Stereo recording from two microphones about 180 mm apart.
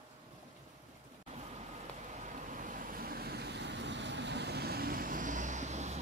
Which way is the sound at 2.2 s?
45° right (ahead or behind).